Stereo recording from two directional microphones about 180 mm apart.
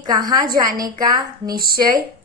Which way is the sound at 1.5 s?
55° right (ahead or behind).